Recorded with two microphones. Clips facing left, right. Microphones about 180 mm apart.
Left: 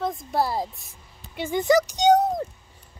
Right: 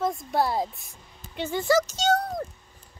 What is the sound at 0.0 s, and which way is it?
Speech, centre (ahead or behind).